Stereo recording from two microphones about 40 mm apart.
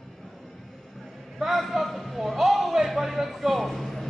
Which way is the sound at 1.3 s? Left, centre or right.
Centre.